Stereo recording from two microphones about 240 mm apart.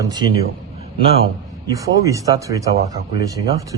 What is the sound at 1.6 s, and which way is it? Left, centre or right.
A man's voice, centre.